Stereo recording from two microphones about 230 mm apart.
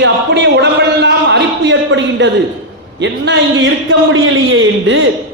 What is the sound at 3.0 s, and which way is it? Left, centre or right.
A man's voice, right.